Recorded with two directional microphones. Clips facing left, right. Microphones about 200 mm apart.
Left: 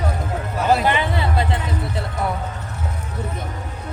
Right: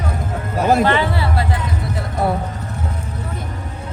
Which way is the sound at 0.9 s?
20° left (ahead or behind).